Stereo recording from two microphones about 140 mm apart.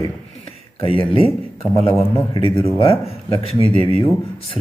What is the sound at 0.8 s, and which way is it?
Speech, 40° left (ahead or behind).